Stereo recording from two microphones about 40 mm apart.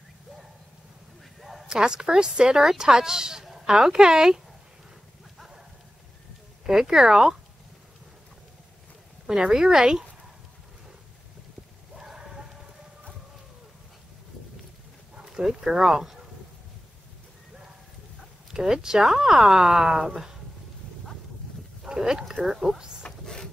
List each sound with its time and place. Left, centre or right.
1.4 s a sound: centre
1.7 s a woman's voice: centre
6.6 s speech: centre
9.4 s speech: centre
12.1 s a sound: centre
15.1 s speech: centre
18.5 s speech: centre
21.8 s speech: centre
22.8 s speech: centre
23.2 s printer: centre